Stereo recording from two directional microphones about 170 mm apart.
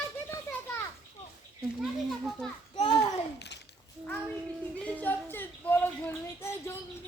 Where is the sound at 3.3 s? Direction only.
90° left.